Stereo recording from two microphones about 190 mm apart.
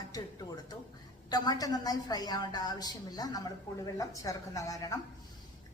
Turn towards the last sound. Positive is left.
turn(degrees=20)  # may be behind; listen again after turning